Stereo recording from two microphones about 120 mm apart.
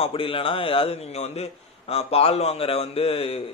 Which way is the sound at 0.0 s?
50° left (ahead or behind).